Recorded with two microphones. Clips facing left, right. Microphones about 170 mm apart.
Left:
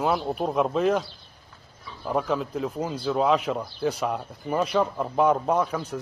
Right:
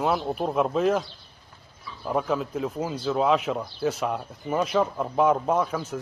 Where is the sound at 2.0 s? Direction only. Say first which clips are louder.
Even; centre (ahead or behind).